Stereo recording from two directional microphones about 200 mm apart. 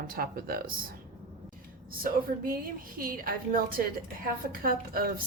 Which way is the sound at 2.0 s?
45° right (ahead or behind).